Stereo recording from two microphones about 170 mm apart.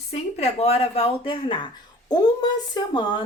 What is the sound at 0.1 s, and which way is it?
Speech, 40° left (ahead or behind).